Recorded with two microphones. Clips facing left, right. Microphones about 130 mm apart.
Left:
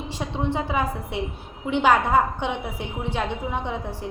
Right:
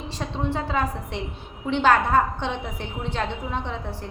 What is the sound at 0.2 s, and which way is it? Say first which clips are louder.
A woman's voice: left 1 dB; 15° left (ahead or behind).